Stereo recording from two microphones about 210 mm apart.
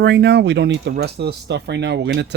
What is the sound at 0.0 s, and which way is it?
Speech, 55° right (ahead or behind).